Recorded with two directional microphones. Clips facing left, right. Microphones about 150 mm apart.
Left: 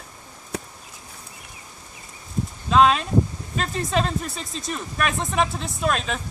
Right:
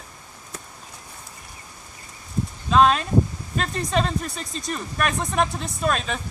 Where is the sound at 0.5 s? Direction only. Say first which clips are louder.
Left 9 dB; 70° left (ahead or behind).